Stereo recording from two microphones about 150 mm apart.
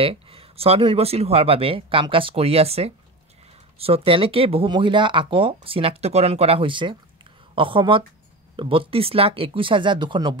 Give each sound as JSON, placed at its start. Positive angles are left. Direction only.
{"t": 0.0, "sound": "speech", "side_deg": -40}